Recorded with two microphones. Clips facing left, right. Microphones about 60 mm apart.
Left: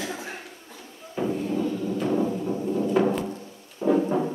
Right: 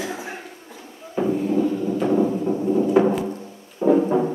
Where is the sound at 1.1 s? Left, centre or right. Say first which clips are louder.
Right 6 dB; centre.